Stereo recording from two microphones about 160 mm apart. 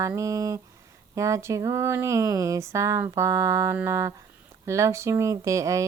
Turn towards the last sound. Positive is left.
turn(degrees=-20)  # may be behind; listen again after turning